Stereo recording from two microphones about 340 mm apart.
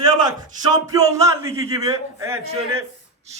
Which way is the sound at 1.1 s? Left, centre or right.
Centre.